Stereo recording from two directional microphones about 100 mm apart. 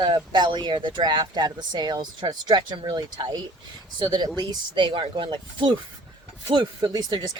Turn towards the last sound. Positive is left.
turn(degrees=-40)  # may be behind; listen again after turning